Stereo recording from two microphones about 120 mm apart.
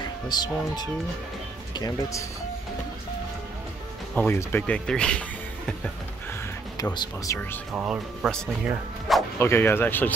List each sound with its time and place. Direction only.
0.3 s speech: 35° left (ahead or behind)
4.1 s speech: 15° left (ahead or behind)
6.8 s speech: 35° left (ahead or behind)
7.7 s speech: 10° right (ahead or behind)
9.4 s speech: 20° left (ahead or behind)